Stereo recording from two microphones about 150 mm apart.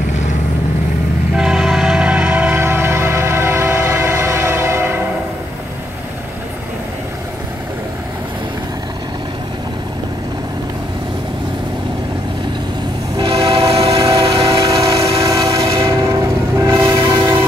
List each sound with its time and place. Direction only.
1.3 s train: 5° right (ahead or behind)
13.4 s train: 25° right (ahead or behind)
13.7 s train: 40° right (ahead or behind)
14.8 s train: 20° right (ahead or behind)